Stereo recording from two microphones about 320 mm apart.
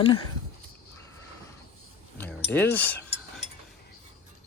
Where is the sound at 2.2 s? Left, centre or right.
Centre.